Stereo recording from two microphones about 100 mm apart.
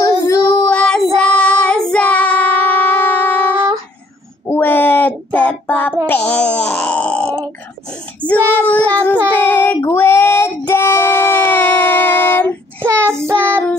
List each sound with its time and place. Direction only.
0.0 s child singing: 30° left (ahead or behind)
0.7 s child singing: 10° left (ahead or behind)
6.0 s a sound: 15° left (ahead or behind)
8.2 s child singing: 15° left (ahead or behind)
9.8 s female singing: 25° left (ahead or behind)
10.7 s music: 25° left (ahead or behind)